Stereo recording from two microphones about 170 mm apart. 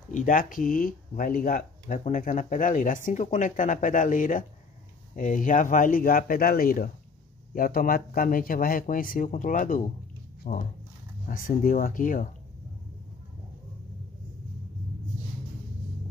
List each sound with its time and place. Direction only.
0.1 s speech: 50° left (ahead or behind)